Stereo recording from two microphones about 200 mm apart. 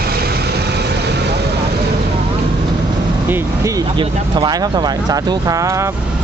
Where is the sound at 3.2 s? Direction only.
10° right (ahead or behind).